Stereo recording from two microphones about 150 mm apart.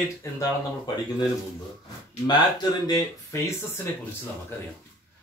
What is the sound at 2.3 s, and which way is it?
Speech, 25° left (ahead or behind).